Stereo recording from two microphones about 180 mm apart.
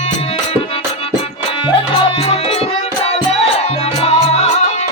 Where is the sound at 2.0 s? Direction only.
30° left (ahead or behind).